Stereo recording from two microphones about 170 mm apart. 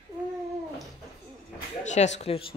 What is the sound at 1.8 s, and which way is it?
Speech, 45° left (ahead or behind).